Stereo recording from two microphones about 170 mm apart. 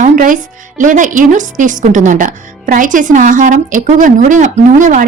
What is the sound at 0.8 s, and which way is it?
Speech, 50° right (ahead or behind).